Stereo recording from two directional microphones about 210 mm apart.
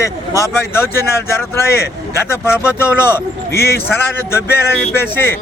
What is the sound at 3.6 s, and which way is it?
Speech, 50° left (ahead or behind).